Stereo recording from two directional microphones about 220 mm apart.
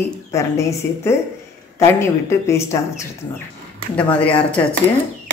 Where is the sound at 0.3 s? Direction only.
15° left (ahead or behind).